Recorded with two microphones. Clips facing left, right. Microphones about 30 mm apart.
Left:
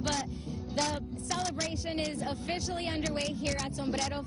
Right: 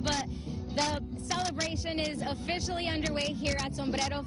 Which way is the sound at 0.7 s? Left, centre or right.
Right.